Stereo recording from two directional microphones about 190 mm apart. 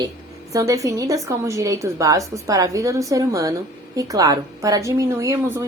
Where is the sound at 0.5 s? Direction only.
15° right (ahead or behind).